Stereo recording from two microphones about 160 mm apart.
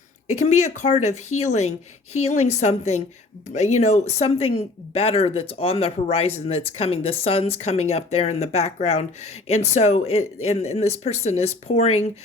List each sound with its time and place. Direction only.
0.3 s speech: 45° left (ahead or behind)